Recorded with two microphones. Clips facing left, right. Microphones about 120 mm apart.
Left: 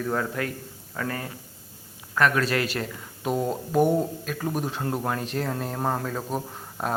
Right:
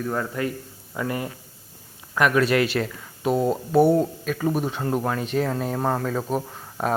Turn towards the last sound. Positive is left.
turn(degrees=0)  # may be behind; listen again after turning